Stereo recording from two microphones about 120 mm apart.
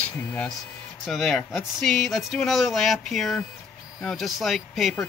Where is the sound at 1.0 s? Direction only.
Centre (ahead or behind).